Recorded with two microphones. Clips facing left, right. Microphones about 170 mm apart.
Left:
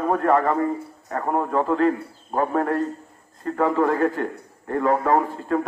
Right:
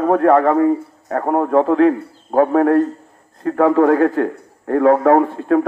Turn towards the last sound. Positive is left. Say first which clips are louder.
# right 7 dB
turn(degrees=-60)  # may be behind; listen again after turning